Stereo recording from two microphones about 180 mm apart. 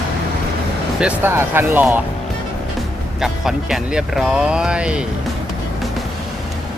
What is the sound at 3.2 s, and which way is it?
Speech, centre (ahead or behind).